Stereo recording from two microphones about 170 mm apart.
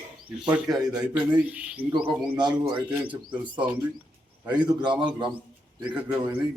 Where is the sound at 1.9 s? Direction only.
30° right (ahead or behind).